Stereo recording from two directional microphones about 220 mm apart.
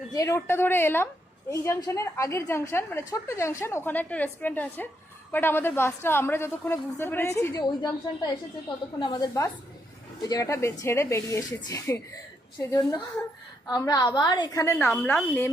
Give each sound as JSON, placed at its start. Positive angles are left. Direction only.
{"t": 0.1, "sound": "a woman's voice", "side_deg": 15}